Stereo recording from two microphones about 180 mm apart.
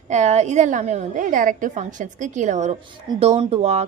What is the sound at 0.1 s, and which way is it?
A woman's voice, 40° right (ahead or behind).